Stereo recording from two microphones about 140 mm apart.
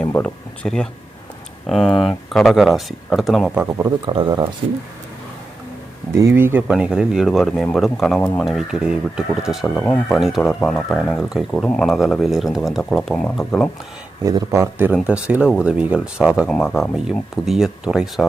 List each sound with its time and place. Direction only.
0.0 s speech: 5° left (ahead or behind)
3.5 s speech: 15° right (ahead or behind)
4.0 s speech: 35° right (ahead or behind)
6.1 s speech: 20° right (ahead or behind); by 9.7 s 5° right (ahead or behind)
9.7 s speech: 10° left (ahead or behind)
14.2 s speech: 25° right (ahead or behind)
14.9 s speech: 5° right (ahead or behind)